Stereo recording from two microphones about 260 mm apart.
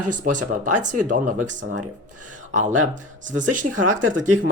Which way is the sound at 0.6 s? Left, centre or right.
Right.